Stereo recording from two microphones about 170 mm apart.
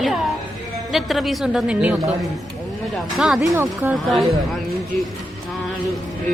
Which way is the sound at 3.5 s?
15° right (ahead or behind).